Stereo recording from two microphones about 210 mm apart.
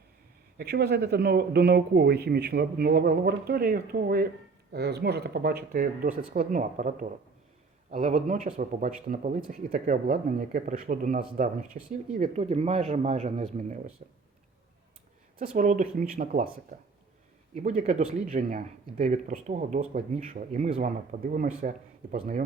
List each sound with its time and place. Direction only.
0.6 s speech: 50° right (ahead or behind)
12.4 s speech: 30° right (ahead or behind)
15.5 s speech: 40° right (ahead or behind)
17.5 s speech: 35° right (ahead or behind)